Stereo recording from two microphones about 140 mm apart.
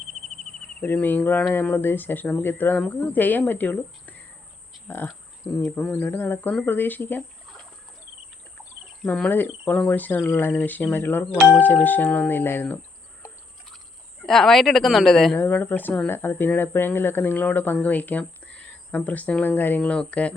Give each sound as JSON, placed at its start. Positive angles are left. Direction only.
{"t": 0.1, "sound": "cricket", "side_deg": -55}
{"t": 0.3, "sound": "cricket", "side_deg": 5}
{"t": 1.5, "sound": "a woman's voice", "side_deg": 15}
{"t": 9.0, "sound": "speech", "side_deg": 10}
{"t": 14.2, "sound": "a woman's voice", "side_deg": 0}